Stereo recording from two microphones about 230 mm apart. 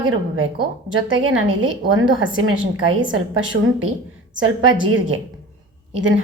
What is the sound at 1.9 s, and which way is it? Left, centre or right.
A woman's voice, right.